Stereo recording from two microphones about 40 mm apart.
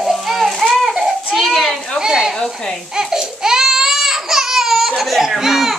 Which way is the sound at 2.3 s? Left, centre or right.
Centre.